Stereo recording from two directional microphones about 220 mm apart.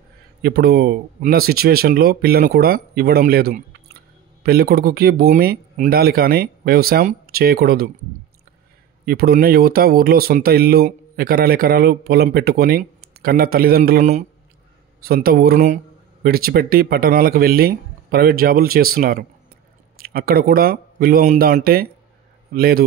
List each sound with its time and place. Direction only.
0.4 s speech: 45° right (ahead or behind)
9.0 s speech: 45° right (ahead or behind)